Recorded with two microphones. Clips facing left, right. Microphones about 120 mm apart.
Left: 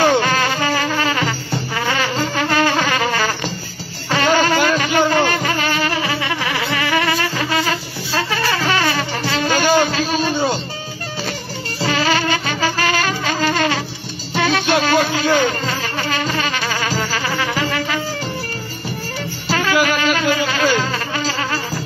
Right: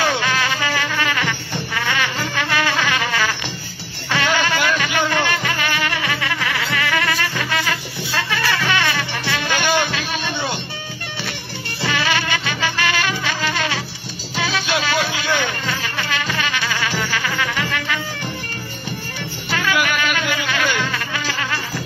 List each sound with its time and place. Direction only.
0.0 s music: 45° left (ahead or behind)
1.8 s a sound: 35° left (ahead or behind)
4.1 s music: 40° left (ahead or behind)
11.8 s music: 40° left (ahead or behind)
19.5 s music: 35° left (ahead or behind)